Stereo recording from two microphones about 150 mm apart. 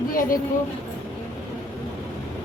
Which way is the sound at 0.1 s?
70° left (ahead or behind).